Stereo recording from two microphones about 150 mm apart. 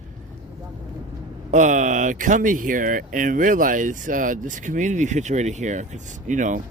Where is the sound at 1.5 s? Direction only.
55° right (ahead or behind).